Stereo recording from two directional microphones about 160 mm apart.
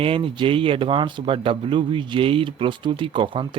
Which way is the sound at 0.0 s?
35° right (ahead or behind).